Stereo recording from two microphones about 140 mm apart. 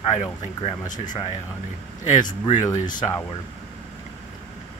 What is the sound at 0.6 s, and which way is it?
Speech, 50° left (ahead or behind).